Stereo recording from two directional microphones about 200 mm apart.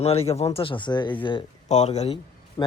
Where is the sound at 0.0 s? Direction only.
30° left (ahead or behind).